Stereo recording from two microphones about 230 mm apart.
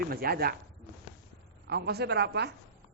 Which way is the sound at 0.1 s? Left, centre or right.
Right.